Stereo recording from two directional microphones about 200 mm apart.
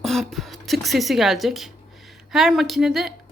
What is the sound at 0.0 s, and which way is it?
A woman's voice, centre (ahead or behind).